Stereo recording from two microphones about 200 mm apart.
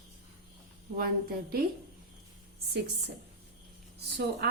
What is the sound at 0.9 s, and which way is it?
Speech, 50° right (ahead or behind).